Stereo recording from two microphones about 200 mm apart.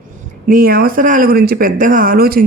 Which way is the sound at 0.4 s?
45° right (ahead or behind).